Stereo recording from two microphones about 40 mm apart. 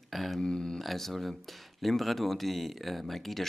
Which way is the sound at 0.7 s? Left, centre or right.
Centre.